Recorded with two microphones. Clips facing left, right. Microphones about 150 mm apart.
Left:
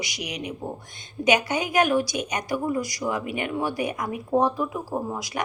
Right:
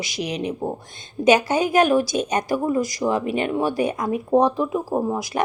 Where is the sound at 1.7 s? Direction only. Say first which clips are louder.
Right 3 dB; 25° right (ahead or behind).